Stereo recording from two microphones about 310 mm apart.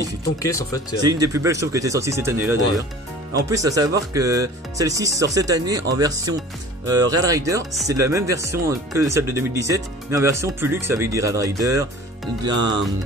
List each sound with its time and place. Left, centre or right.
0.4 s speech: centre
1.0 s speech: centre
12.5 s music: right